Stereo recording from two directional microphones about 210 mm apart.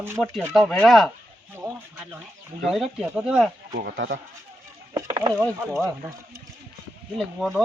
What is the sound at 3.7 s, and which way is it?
Speech, 45° right (ahead or behind).